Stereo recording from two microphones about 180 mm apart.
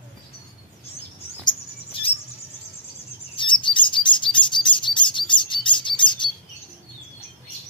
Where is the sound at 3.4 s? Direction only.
25° left (ahead or behind).